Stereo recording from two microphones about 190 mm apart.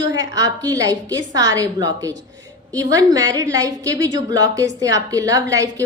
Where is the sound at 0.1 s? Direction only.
20° right (ahead or behind).